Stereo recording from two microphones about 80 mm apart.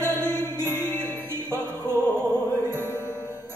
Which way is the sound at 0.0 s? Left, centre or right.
Right.